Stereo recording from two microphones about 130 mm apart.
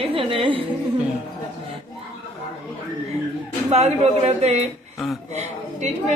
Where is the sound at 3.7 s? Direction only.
55° right (ahead or behind).